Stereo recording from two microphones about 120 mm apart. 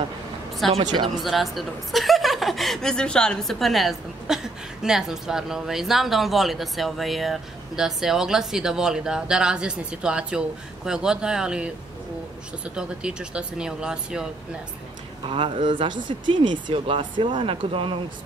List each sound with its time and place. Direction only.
0.6 s speech: centre (ahead or behind)
12.7 s speech: 10° right (ahead or behind)
15.2 s speech: 45° right (ahead or behind)